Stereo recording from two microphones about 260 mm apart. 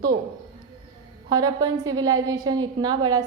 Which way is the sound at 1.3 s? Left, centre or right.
Centre.